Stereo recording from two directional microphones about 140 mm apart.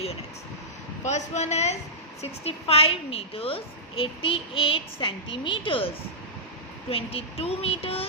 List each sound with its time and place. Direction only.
1.0 s a woman's voice: 55° left (ahead or behind); by 5.9 s 40° left (ahead or behind)
6.9 s speech: 45° left (ahead or behind)